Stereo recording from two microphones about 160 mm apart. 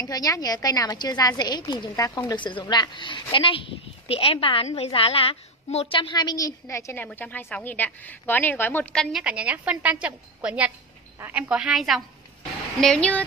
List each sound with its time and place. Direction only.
0.0 s a woman's voice: 25° left (ahead or behind); by 9.2 s 5° left (ahead or behind)
9.2 s a woman's voice: 5° right (ahead or behind)